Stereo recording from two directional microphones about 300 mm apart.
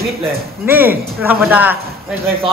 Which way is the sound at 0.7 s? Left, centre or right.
Centre.